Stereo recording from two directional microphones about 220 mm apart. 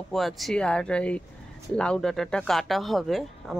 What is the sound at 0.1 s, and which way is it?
A man's voice, centre (ahead or behind).